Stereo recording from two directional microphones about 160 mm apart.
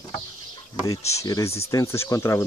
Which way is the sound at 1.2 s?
20° left (ahead or behind).